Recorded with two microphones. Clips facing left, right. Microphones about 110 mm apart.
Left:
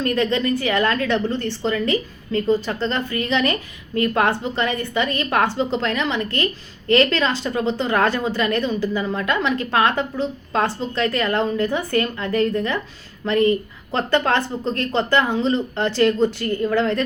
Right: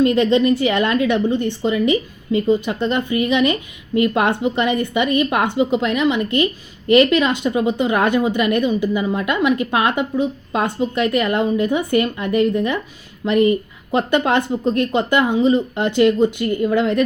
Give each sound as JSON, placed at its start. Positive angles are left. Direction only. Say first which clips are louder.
{"t": 0.0, "sound": "a woman's voice", "louder": "right 6 dB", "side_deg": -20}